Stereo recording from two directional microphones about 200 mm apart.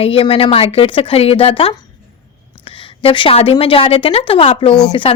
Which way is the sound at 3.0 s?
25° left (ahead or behind).